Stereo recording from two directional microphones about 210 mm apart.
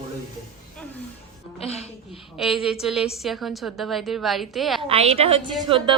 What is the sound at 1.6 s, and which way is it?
Speech, 30° left (ahead or behind).